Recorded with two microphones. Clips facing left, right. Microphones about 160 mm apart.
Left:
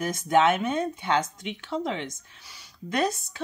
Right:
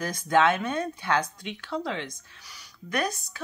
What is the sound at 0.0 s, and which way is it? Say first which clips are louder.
Speech: left 1 dB; 20° left (ahead or behind).